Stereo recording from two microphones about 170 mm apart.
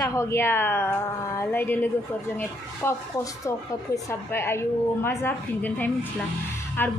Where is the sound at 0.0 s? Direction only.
20° left (ahead or behind).